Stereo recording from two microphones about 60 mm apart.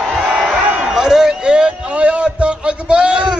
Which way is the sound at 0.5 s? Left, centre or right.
Centre.